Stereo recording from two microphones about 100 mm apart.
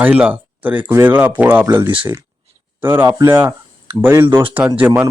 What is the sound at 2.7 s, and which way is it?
Speech, 20° right (ahead or behind).